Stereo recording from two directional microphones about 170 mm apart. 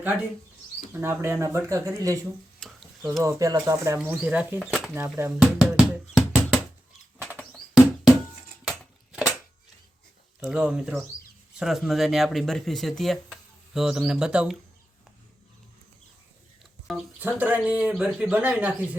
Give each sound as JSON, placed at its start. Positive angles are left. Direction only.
{"t": 0.9, "sound": "speech", "side_deg": -15}
{"t": 2.6, "sound": "a sound", "side_deg": 0}
{"t": 3.2, "sound": "speech", "side_deg": -20}
{"t": 3.9, "sound": "speech", "side_deg": -10}
{"t": 4.9, "sound": "speech", "side_deg": -15}
{"t": 5.4, "sound": "music", "side_deg": -5}
{"t": 8.6, "sound": "a sound", "side_deg": 0}
{"t": 10.4, "sound": "speech", "side_deg": -5}
{"t": 16.8, "sound": "a sound", "side_deg": 0}
{"t": 17.2, "sound": "speech", "side_deg": -10}